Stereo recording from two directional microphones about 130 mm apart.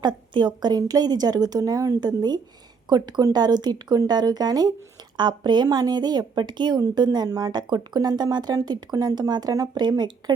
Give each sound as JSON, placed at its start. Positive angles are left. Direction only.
{"t": 0.0, "sound": "a woman's voice", "side_deg": -35}